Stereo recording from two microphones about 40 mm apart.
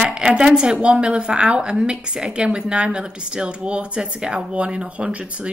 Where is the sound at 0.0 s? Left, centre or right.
Right.